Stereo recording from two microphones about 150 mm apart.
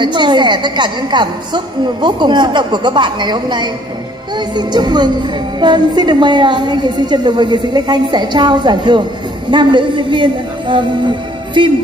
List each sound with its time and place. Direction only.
0.0 s a woman's voice: 30° right (ahead or behind)